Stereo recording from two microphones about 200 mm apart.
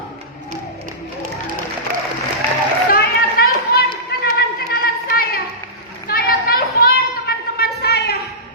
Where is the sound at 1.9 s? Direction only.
50° right (ahead or behind).